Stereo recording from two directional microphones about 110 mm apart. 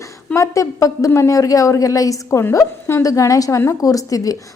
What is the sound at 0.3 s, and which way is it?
A woman's voice, 30° left (ahead or behind).